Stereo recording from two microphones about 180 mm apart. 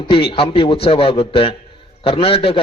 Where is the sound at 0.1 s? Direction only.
30° left (ahead or behind).